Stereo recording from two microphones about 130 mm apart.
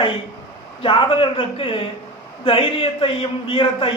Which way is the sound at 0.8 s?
45° left (ahead or behind).